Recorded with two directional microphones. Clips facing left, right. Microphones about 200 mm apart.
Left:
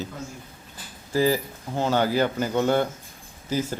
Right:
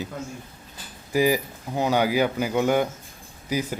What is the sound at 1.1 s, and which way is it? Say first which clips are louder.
A man's voice: right 1 dB; 15° right (ahead or behind).